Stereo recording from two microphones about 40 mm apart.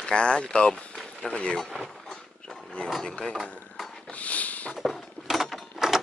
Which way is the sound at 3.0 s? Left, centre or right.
Centre.